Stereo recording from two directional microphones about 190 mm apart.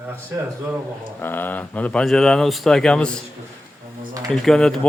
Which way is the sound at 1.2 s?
10° left (ahead or behind).